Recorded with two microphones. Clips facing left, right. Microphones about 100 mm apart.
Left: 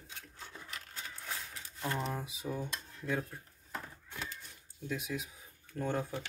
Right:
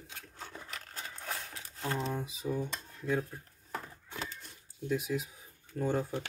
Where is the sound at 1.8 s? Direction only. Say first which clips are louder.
Right 2 dB; 5° left (ahead or behind).